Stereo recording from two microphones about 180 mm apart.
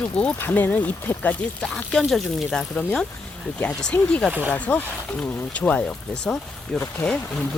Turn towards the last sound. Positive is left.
turn(degrees=5)  # may be behind; listen again after turning